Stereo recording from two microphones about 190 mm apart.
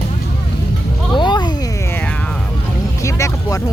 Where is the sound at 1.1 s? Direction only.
25° left (ahead or behind).